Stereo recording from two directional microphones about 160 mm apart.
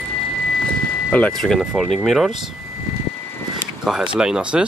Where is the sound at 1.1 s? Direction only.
5° left (ahead or behind).